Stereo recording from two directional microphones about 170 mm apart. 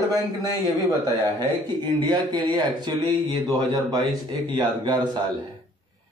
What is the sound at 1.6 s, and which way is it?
Speech, 25° right (ahead or behind).